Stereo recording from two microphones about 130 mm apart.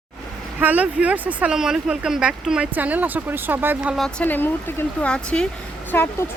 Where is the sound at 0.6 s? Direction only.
10° right (ahead or behind).